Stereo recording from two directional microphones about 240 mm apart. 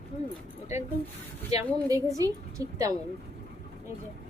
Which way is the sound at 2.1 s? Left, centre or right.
Centre.